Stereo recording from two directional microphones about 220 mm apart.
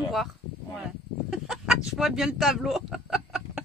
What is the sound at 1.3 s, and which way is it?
Speech, centre (ahead or behind).